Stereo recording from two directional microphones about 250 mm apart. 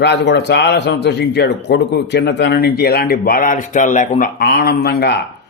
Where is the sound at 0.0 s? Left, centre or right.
Left.